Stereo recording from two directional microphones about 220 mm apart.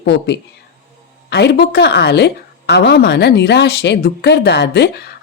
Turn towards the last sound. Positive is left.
turn(degrees=50)  # may be behind; listen again after turning